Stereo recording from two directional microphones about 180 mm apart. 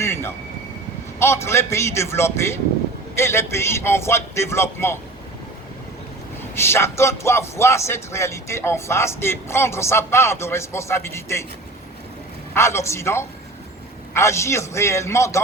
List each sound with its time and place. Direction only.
0.0 s vehicle: 15° left (ahead or behind)
1.2 s a man's voice: 15° left (ahead or behind)
6.6 s a man's voice: 15° left (ahead or behind)
12.5 s a man's voice: 15° left (ahead or behind)